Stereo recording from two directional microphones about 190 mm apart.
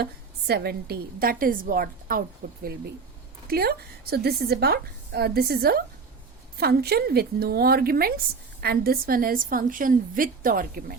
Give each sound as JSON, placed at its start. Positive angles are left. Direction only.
{"t": 0.0, "sound": "a woman's voice", "side_deg": -55}